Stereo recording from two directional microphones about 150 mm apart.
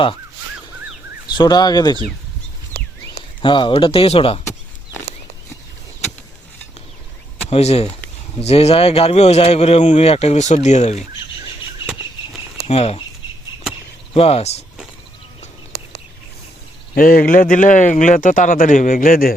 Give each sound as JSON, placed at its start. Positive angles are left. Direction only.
{"t": 1.4, "sound": "speech", "side_deg": 25}
{"t": 3.4, "sound": "speech", "side_deg": 35}
{"t": 7.5, "sound": "speech", "side_deg": 45}
{"t": 12.6, "sound": "speech", "side_deg": 45}
{"t": 14.1, "sound": "speech", "side_deg": 40}
{"t": 16.9, "sound": "speech", "side_deg": 70}